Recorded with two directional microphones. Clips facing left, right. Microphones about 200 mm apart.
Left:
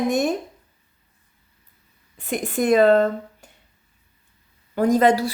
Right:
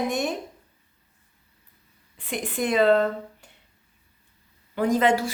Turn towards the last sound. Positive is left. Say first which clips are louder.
# left 4 dB
turn(degrees=35)  # may be behind; listen again after turning